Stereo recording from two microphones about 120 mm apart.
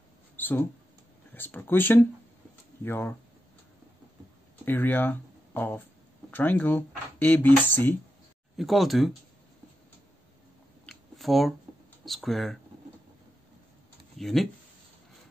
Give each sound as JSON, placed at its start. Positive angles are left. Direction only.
{"t": 0.4, "sound": "speech", "side_deg": 15}
{"t": 4.6, "sound": "speech", "side_deg": 15}
{"t": 8.5, "sound": "speech", "side_deg": 0}
{"t": 10.9, "sound": "a sound", "side_deg": 0}
{"t": 12.0, "sound": "speech", "side_deg": 0}
{"t": 14.1, "sound": "speech", "side_deg": 0}